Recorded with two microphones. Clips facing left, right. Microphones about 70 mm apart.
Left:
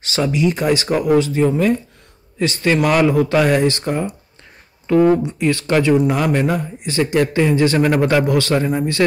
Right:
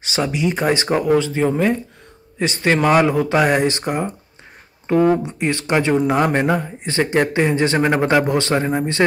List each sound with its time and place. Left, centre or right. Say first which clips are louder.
0.0 s a man's voice: left 3 dB; right
5.1 s a man's voice: left 3 dB; right